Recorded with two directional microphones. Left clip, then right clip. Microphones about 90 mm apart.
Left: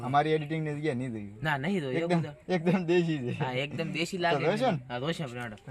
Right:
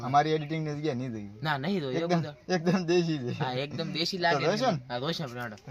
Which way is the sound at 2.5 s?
15° right (ahead or behind).